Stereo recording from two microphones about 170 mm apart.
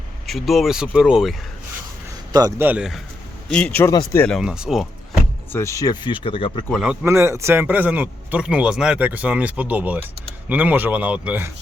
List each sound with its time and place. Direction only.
0.3 s speech: centre (ahead or behind)
2.6 s speech: 10° right (ahead or behind)
3.5 s speech: 10° left (ahead or behind)
4.4 s speech: 5° right (ahead or behind)
5.5 s speech: 15° left (ahead or behind); by 6.7 s 30° left (ahead or behind)
6.7 s speech: centre (ahead or behind)
7.0 s speech: 15° right (ahead or behind)